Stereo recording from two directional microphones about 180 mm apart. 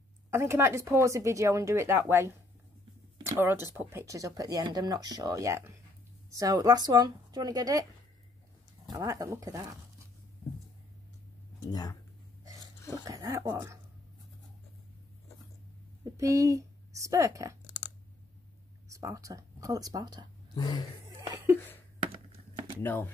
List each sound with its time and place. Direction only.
0.3 s a woman's voice: 15° right (ahead or behind)
8.9 s a woman's voice: 20° right (ahead or behind)
11.7 s speech: 20° left (ahead or behind)
12.9 s speech: 20° right (ahead or behind)
16.0 s speech: 15° right (ahead or behind)
18.9 s speech: 15° right (ahead or behind)
20.5 s speech: 25° left (ahead or behind)
22.8 s speech: 10° left (ahead or behind)